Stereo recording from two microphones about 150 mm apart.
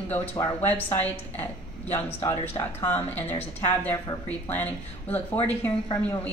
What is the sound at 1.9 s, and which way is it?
A woman's voice, 15° left (ahead or behind).